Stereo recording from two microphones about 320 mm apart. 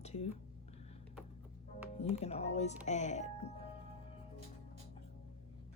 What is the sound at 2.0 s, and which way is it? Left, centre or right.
Speech, centre.